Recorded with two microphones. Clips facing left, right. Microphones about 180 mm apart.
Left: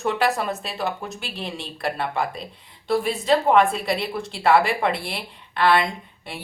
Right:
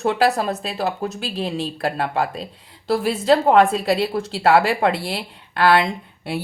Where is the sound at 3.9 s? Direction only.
35° right (ahead or behind).